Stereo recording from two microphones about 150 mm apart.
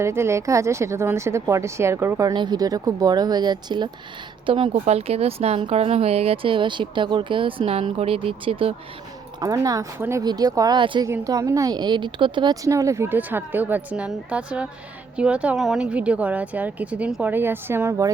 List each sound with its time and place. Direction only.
0.0 s a woman's voice: 15° right (ahead or behind); by 8.7 s 35° right (ahead or behind)
9.4 s a woman's voice: 25° right (ahead or behind)